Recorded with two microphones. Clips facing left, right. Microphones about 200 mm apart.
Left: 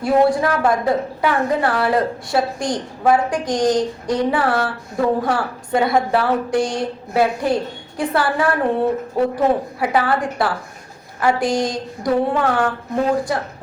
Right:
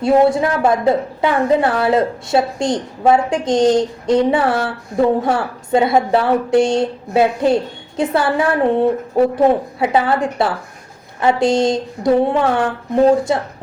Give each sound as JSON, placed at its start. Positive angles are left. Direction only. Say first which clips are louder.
{"t": 0.0, "sound": "a woman's voice", "louder": "right 3 dB", "side_deg": -25}
{"t": 9.8, "sound": "a woman's voice", "louder": "right 3 dB", "side_deg": -25}